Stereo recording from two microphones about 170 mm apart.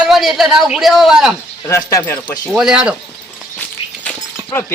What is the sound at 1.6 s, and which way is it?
Speech, 15° left (ahead or behind).